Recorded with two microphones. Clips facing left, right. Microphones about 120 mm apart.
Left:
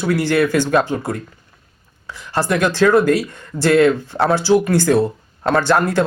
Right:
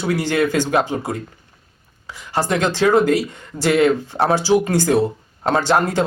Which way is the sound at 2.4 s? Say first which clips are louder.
Left 2 dB; 20° right (ahead or behind).